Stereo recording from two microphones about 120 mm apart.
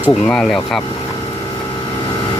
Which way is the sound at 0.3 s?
5° left (ahead or behind).